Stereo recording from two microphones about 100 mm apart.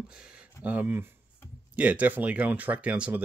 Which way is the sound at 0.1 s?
10° right (ahead or behind).